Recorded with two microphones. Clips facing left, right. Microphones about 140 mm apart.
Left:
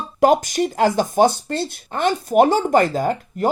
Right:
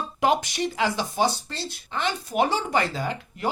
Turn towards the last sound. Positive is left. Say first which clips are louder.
# left 8 dB
turn(degrees=45)  # may be behind; listen again after turning